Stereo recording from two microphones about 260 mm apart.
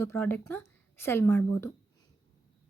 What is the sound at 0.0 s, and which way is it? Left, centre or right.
A woman's voice, centre.